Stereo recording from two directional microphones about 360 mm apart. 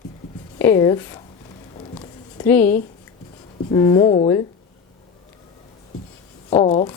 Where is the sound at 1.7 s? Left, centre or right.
Centre.